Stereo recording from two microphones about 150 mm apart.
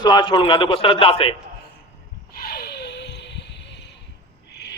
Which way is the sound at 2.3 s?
75° left (ahead or behind).